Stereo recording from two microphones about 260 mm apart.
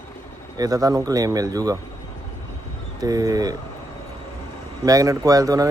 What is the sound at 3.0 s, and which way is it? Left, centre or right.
Speech, centre.